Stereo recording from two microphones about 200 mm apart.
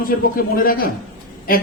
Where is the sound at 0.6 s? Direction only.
45° left (ahead or behind).